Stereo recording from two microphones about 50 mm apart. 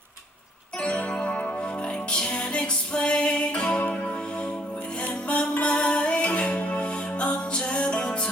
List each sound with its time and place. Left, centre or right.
0.8 s music: left